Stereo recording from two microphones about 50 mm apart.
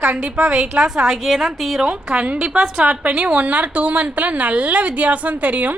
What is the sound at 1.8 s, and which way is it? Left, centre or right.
Speech, centre.